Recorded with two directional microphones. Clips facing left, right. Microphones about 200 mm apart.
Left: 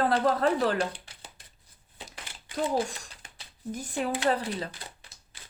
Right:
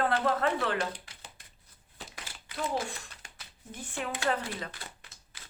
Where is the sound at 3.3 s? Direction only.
40° left (ahead or behind).